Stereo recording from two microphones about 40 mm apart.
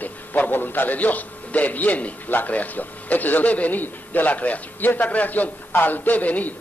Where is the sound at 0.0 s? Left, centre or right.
Left.